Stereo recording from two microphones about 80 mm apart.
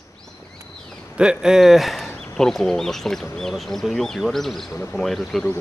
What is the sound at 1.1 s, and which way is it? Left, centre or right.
Speech, centre.